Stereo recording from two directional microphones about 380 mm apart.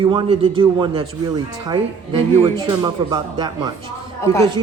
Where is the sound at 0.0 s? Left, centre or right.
Centre.